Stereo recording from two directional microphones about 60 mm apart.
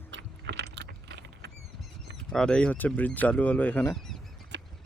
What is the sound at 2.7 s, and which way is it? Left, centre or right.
Speech, left.